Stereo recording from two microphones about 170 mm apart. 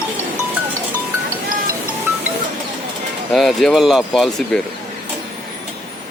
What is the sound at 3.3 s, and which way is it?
Speech, centre (ahead or behind).